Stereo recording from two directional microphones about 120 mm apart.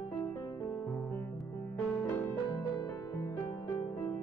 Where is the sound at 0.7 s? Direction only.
15° left (ahead or behind).